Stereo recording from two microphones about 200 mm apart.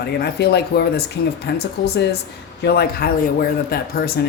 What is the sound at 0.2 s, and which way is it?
Speech, 55° left (ahead or behind).